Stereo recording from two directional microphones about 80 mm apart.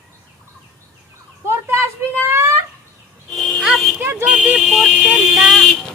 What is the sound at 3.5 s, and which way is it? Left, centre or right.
Music, centre.